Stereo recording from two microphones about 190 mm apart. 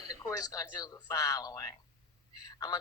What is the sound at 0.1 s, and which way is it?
Speech, 20° left (ahead or behind).